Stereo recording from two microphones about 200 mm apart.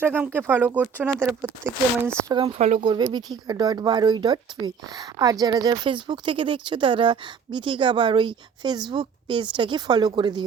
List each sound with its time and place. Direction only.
0.0 s speech: 10° right (ahead or behind)
2.6 s speech: 35° right (ahead or behind)
2.8 s speech: 20° right (ahead or behind)